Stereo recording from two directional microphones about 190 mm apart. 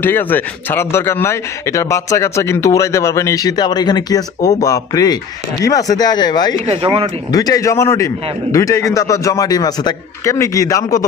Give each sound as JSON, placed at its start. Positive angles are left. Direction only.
{"t": 0.0, "sound": "speech", "side_deg": 10}
{"t": 6.6, "sound": "speech", "side_deg": -35}
{"t": 7.2, "sound": "speech", "side_deg": 20}